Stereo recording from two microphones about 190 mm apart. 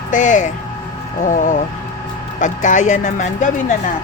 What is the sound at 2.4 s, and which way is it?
Speech, 40° left (ahead or behind).